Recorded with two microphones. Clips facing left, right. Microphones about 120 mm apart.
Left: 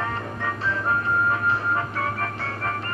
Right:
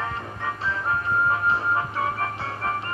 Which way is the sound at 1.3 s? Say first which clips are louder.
Even; 25° right (ahead or behind).